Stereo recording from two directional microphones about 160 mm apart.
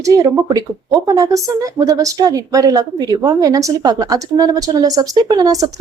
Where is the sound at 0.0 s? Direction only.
20° right (ahead or behind).